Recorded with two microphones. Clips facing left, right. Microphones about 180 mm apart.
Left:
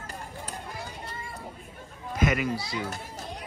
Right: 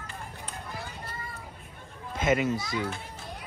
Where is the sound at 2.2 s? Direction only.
25° right (ahead or behind).